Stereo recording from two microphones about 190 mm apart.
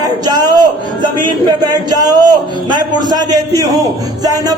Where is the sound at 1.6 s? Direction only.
20° right (ahead or behind).